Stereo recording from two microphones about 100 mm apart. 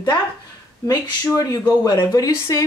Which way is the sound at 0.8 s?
35° left (ahead or behind).